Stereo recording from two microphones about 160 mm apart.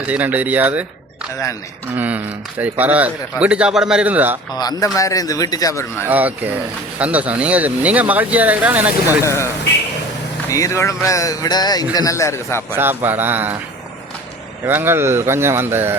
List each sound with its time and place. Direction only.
0.1 s speech: 10° right (ahead or behind)
2.0 s speech: 10° right (ahead or behind)
4.8 s speech: 20° left (ahead or behind)
6.1 s speech: 10° right (ahead or behind)
9.2 s speech: 15° left (ahead or behind)
10.5 s speech: 20° left (ahead or behind)
12.7 s speech: 15° right (ahead or behind)
14.6 s speech: 15° right (ahead or behind)